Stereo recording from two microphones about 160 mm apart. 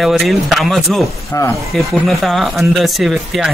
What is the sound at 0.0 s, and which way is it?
Speech, centre (ahead or behind).